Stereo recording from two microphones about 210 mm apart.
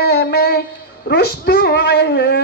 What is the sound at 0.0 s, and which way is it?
Speech, 50° left (ahead or behind).